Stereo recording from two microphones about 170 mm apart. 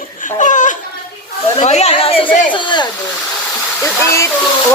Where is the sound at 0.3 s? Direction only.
45° left (ahead or behind).